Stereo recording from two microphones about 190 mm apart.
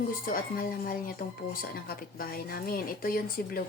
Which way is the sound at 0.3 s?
50° left (ahead or behind).